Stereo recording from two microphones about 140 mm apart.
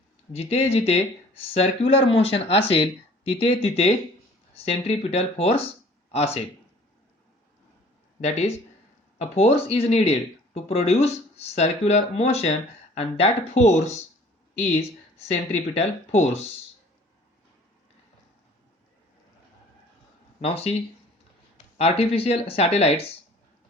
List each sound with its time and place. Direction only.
0.3 s speech: 50° left (ahead or behind)
8.2 s speech: 50° left (ahead or behind)
15.3 s speech: 50° left (ahead or behind)
20.4 s speech: 45° left (ahead or behind)
21.8 s speech: 45° left (ahead or behind)